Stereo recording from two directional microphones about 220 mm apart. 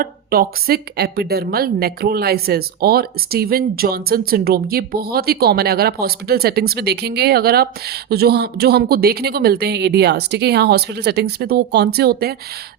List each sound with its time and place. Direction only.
0.0 s a woman's voice: 40° right (ahead or behind)